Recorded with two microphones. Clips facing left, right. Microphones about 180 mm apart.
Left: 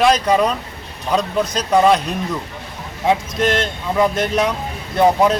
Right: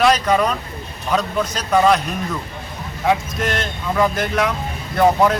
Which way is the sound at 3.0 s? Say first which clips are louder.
Left 2 dB; 25° left (ahead or behind).